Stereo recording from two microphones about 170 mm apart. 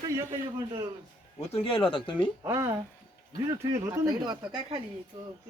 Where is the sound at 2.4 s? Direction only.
15° right (ahead or behind).